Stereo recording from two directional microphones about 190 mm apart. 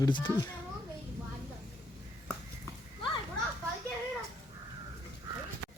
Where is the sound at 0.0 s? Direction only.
20° left (ahead or behind).